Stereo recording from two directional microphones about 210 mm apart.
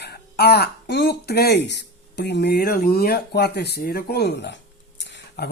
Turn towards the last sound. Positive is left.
turn(degrees=55)  # may be behind; listen again after turning